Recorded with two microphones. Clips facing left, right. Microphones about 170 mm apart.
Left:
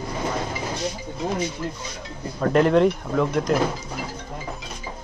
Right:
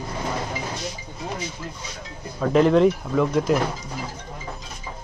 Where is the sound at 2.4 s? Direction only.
Centre (ahead or behind).